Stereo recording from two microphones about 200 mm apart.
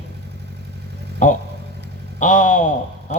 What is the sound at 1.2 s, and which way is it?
A man's voice, 40° left (ahead or behind).